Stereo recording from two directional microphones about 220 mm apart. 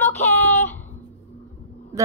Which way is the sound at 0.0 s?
10° left (ahead or behind).